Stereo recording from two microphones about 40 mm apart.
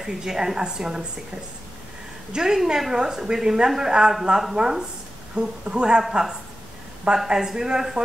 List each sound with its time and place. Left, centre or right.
0.0 s a woman's voice: centre
2.3 s a woman's voice: centre
7.2 s a woman's voice: centre